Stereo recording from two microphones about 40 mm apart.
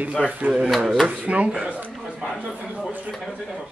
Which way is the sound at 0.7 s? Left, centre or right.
Centre.